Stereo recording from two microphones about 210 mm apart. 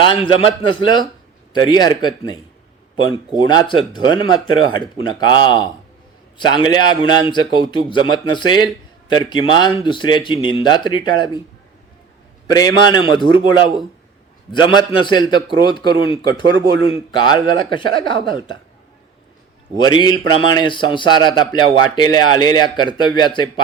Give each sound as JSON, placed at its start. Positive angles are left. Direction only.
{"t": 0.0, "sound": "speech", "side_deg": 25}
{"t": 12.5, "sound": "speech", "side_deg": 20}
{"t": 14.5, "sound": "speech", "side_deg": 20}
{"t": 16.4, "sound": "a man's voice", "side_deg": -55}
{"t": 16.8, "sound": "speech", "side_deg": 20}
{"t": 19.8, "sound": "speech", "side_deg": 20}